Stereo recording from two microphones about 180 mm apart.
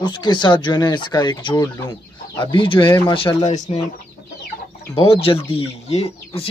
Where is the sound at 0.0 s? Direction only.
25° left (ahead or behind).